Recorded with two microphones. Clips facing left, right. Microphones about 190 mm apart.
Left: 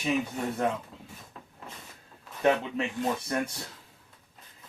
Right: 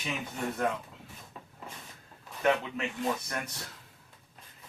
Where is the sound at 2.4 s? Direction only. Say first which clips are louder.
Left 3 dB; 30° left (ahead or behind).